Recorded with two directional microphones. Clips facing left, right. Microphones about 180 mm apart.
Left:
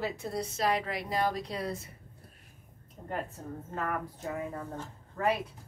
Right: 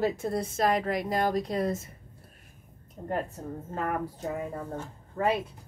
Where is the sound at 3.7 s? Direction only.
35° right (ahead or behind).